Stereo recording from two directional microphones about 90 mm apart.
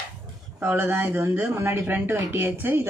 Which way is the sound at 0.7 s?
25° right (ahead or behind).